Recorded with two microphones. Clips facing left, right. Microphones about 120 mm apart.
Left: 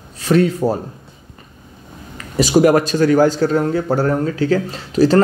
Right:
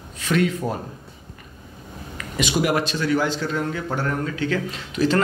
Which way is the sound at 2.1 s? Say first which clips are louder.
Left 9 dB; 35° left (ahead or behind).